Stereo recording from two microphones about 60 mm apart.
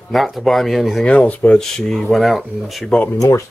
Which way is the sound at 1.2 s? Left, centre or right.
Left.